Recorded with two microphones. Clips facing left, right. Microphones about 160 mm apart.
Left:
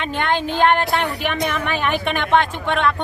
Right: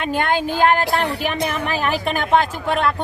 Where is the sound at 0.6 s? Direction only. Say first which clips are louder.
Even; 35° right (ahead or behind).